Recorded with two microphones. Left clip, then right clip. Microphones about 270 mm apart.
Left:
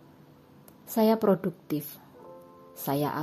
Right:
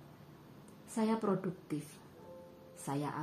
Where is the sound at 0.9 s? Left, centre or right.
Left.